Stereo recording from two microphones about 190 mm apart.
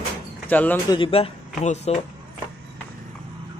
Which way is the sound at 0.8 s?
25° left (ahead or behind).